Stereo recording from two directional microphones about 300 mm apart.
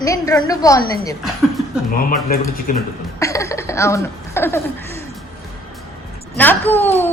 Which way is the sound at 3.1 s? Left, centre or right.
Centre.